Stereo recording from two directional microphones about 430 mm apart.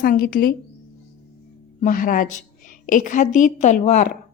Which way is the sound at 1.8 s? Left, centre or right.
Centre.